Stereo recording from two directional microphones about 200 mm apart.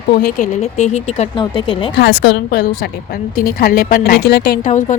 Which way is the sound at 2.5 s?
55° left (ahead or behind).